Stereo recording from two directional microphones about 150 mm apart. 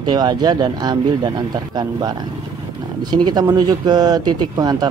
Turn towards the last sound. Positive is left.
turn(degrees=-25)  # may be behind; listen again after turning